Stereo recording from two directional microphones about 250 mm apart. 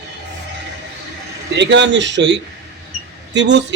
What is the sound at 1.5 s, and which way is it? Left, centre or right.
A man's voice, right.